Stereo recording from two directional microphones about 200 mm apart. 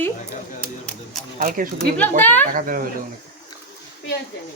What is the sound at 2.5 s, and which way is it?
Speech, 45° right (ahead or behind).